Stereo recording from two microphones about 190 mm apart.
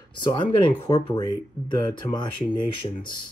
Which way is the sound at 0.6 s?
25° left (ahead or behind).